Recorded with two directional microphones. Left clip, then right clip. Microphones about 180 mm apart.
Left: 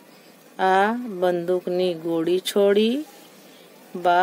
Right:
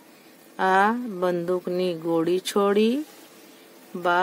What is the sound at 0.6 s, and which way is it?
Speech, 20° right (ahead or behind).